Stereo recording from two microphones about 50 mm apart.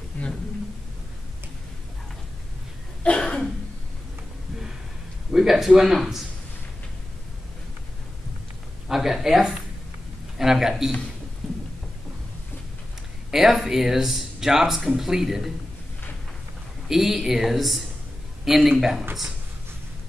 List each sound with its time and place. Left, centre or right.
0.2 s a sound: left
3.0 s cough: left
5.3 s speech: centre
8.8 s a sound: centre
10.3 s a man's voice: centre
13.3 s speech: centre
16.9 s speech: centre